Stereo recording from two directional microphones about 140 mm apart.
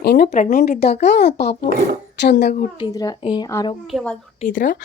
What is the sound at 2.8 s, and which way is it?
Speech, 30° left (ahead or behind).